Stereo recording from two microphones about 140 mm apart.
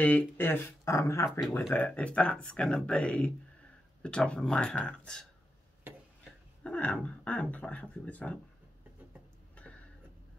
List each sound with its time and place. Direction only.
0.0 s speech: 15° left (ahead or behind)
6.6 s speech: 10° left (ahead or behind)